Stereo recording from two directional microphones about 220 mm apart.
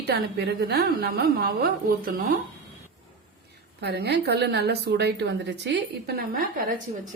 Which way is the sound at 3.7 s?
50° right (ahead or behind).